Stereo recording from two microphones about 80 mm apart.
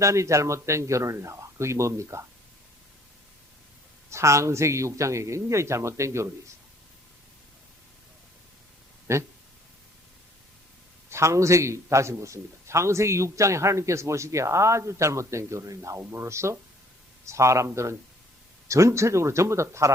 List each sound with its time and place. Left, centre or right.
0.0 s a man's voice: right
4.1 s a man's voice: right
9.1 s a man's voice: right
11.1 s a man's voice: right